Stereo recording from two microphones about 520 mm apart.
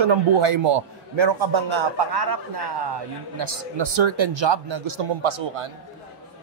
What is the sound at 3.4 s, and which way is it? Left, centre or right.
A man's voice, right.